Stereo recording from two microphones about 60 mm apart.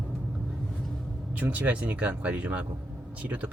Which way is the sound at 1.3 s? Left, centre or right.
Right.